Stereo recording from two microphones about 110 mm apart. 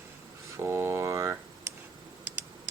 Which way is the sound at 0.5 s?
25° right (ahead or behind).